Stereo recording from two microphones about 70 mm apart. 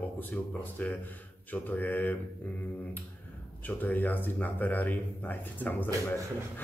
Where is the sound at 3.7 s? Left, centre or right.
Left.